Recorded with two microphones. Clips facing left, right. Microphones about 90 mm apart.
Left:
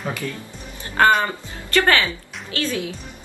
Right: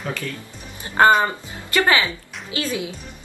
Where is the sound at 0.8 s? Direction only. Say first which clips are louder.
Right 2 dB; 20° right (ahead or behind).